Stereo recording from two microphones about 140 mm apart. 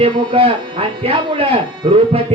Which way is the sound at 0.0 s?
40° right (ahead or behind).